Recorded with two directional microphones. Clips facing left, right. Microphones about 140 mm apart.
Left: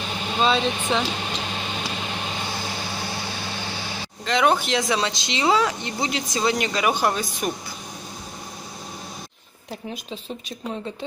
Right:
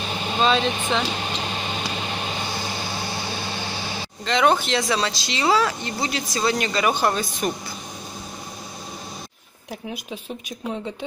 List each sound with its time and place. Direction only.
0.4 s speech: 10° left (ahead or behind)
4.3 s speech: 10° left (ahead or behind)